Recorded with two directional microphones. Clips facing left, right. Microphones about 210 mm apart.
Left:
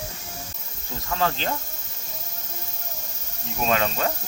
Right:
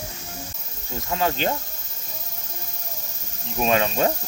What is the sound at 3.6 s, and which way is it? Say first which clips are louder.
Speech: right 3 dB; 15° right (ahead or behind).